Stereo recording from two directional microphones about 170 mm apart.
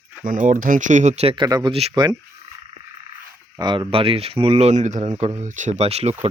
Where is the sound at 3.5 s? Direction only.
25° right (ahead or behind).